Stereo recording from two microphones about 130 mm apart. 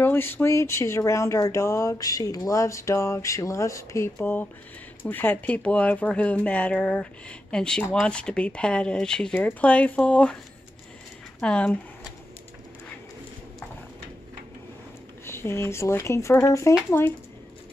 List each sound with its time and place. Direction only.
0.0 s speech: 15° left (ahead or behind)
15.2 s speech: 20° left (ahead or behind)